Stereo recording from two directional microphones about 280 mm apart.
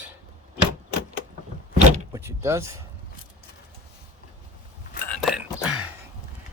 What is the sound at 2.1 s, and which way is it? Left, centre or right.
Speech, centre.